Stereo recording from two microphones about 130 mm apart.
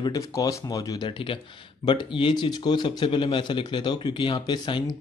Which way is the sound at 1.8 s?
40° left (ahead or behind).